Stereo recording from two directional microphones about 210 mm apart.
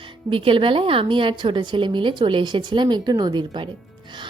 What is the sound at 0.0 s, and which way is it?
A woman's voice, 25° right (ahead or behind).